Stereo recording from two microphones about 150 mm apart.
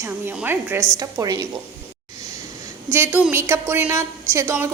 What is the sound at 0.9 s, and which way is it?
Speech, 25° right (ahead or behind).